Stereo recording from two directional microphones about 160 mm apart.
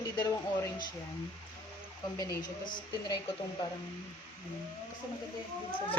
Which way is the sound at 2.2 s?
25° left (ahead or behind).